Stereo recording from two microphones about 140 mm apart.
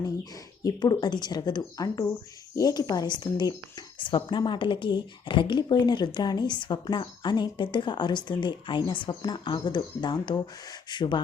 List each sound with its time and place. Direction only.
0.6 s a woman's voice: 30° left (ahead or behind)